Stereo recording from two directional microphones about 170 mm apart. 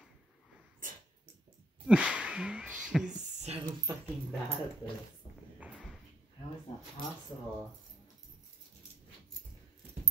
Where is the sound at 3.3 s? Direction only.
40° right (ahead or behind).